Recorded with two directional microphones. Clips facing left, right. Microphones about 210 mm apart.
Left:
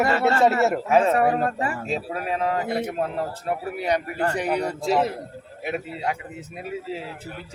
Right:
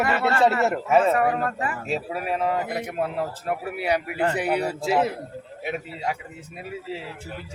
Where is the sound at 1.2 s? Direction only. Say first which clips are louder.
Left 2 dB; 30° left (ahead or behind).